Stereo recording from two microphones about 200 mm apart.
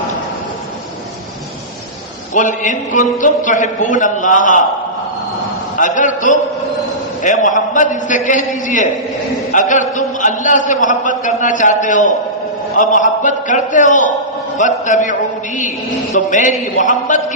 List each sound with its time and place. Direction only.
2.3 s a man's voice: 40° left (ahead or behind)
5.7 s a man's voice: 40° left (ahead or behind)
16.1 s a man's voice: 40° left (ahead or behind)